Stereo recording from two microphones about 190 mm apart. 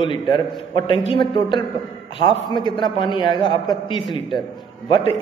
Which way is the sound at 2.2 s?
25° left (ahead or behind).